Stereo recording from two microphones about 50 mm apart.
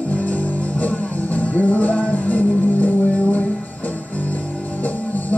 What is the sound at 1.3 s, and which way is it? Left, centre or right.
Music, left.